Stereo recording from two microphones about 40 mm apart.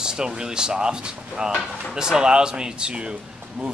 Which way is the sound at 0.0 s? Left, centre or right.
Centre.